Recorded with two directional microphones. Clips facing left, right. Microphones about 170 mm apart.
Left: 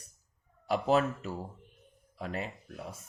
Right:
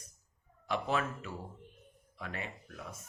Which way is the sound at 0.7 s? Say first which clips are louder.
Left 6 dB; 40° left (ahead or behind).